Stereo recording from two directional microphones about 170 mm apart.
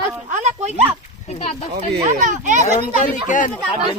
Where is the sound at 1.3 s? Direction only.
40° left (ahead or behind).